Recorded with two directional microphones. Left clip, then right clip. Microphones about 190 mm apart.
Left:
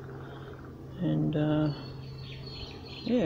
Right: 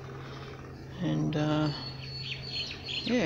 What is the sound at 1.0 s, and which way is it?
Speech, 10° left (ahead or behind).